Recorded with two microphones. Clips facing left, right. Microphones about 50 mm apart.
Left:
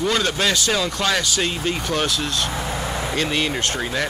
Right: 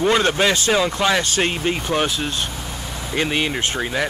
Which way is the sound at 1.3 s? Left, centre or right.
Right.